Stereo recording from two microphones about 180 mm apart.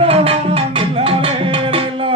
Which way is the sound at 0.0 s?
30° right (ahead or behind).